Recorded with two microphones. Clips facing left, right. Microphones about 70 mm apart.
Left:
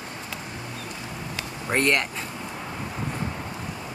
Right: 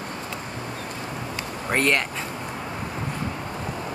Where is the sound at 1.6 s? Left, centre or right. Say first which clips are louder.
Right 1 dB; centre.